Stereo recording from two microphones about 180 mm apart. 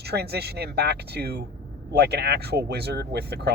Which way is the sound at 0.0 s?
65° right (ahead or behind).